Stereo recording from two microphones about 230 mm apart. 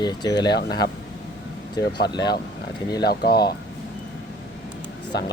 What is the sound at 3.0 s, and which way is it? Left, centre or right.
Speech, left.